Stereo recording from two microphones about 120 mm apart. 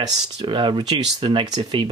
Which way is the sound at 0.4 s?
45° right (ahead or behind).